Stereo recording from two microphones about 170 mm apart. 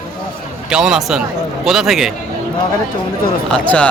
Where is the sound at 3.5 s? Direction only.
5° left (ahead or behind).